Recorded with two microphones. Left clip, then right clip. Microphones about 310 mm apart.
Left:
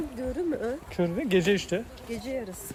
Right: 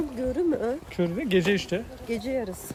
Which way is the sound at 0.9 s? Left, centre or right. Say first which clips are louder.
Left 2 dB; centre.